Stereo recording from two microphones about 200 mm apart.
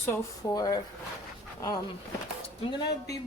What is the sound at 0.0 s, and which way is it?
Speech, 15° left (ahead or behind).